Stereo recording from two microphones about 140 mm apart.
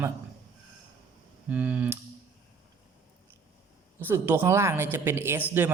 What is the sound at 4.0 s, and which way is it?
Speech, 15° right (ahead or behind).